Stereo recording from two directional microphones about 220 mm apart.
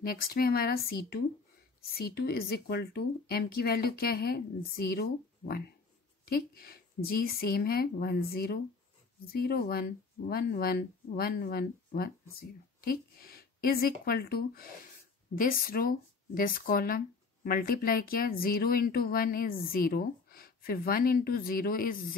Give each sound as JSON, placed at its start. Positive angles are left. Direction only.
{"t": 0.0, "sound": "speech", "side_deg": 40}